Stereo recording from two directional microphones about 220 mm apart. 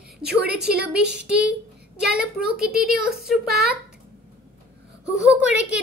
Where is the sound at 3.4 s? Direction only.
45° right (ahead or behind).